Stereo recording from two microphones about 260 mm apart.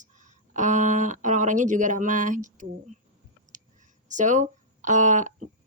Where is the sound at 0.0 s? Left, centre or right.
Right.